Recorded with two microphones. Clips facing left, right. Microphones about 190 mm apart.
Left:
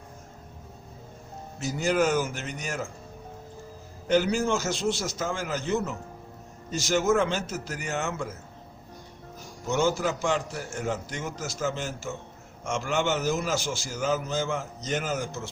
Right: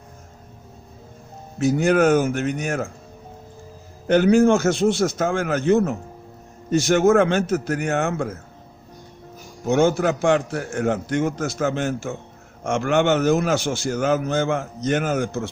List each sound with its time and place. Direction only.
1.5 s a man's voice: 60° right (ahead or behind)
4.0 s a man's voice: 55° right (ahead or behind)
9.6 s a man's voice: 55° right (ahead or behind)